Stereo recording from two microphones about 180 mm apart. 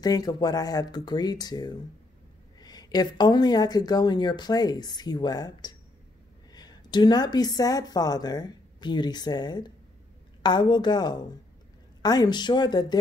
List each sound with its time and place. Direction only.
0.0 s speech: 20° left (ahead or behind)